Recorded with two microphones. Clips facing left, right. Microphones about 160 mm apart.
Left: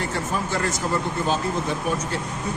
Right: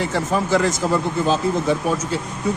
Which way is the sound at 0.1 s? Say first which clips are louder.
Right 7 dB; 90° right.